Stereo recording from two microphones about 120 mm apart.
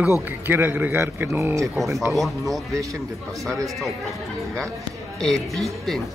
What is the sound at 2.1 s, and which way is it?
Speech, centre (ahead or behind).